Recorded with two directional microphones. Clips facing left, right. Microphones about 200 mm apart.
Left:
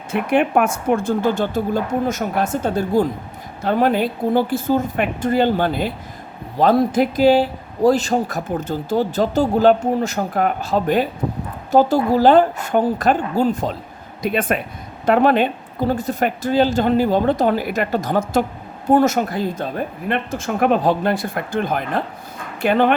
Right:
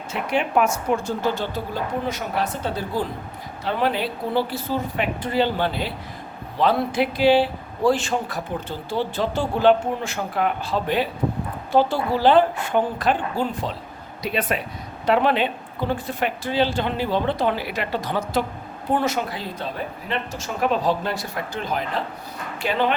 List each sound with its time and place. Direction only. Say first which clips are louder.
0.1 s a man's voice: left 6 dB; 55° left (ahead or behind)